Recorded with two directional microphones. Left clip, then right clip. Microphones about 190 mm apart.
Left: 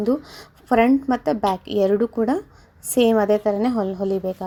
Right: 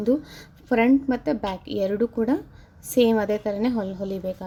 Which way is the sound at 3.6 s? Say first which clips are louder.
Left 4 dB; 15° left (ahead or behind).